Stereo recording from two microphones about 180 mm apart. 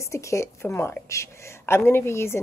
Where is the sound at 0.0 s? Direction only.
15° left (ahead or behind).